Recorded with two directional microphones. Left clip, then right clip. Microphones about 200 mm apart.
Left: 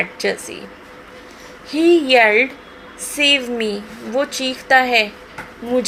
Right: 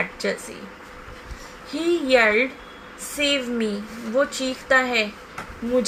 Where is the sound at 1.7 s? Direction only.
35° left (ahead or behind).